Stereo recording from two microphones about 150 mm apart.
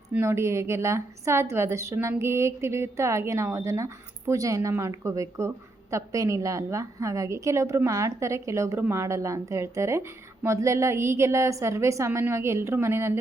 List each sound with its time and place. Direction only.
0.1 s a woman's voice: 15° right (ahead or behind)